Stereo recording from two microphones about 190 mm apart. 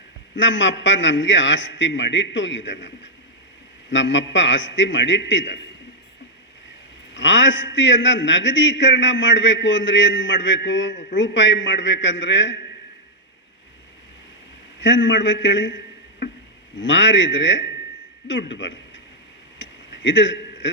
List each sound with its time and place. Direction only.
0.3 s a man's voice: 70° left (ahead or behind)
7.1 s a man's voice: 75° left (ahead or behind)
14.8 s a man's voice: 75° left (ahead or behind)
19.5 s a sound: 75° left (ahead or behind)